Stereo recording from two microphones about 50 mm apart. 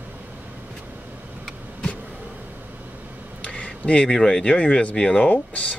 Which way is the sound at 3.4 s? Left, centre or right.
Left.